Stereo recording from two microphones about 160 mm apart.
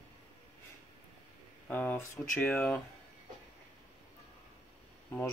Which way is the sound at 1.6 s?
10° left (ahead or behind).